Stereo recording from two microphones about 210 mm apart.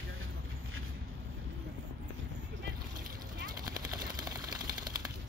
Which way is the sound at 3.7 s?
15° right (ahead or behind).